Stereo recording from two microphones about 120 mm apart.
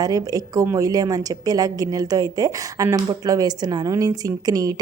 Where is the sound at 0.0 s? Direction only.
30° right (ahead or behind).